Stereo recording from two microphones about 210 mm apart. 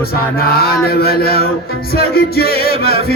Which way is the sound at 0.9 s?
45° left (ahead or behind).